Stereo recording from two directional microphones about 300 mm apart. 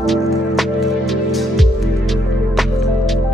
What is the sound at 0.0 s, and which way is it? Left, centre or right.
Music, centre.